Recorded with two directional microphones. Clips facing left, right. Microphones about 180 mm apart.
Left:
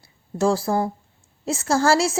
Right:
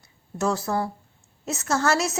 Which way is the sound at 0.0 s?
30° left (ahead or behind).